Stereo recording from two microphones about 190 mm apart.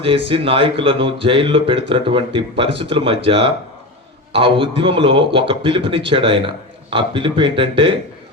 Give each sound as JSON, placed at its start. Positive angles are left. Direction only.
{"t": 0.0, "sound": "speech", "side_deg": -30}